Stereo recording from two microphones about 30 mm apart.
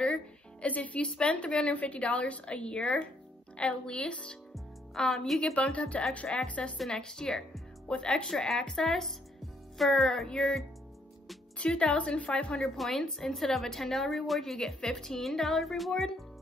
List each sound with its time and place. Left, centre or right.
0.0 s music: left
0.7 s speech: left
1.1 s a woman's voice: left
4.9 s a woman's voice: centre
5.4 s a woman's voice: left
6.9 s a woman's voice: left
7.9 s a woman's voice: left
8.8 s a woman's voice: centre
10.2 s a woman's voice: left
11.5 s a woman's voice: left
12.7 s a woman's voice: centre